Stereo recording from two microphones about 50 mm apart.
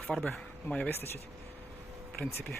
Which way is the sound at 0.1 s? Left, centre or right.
Centre.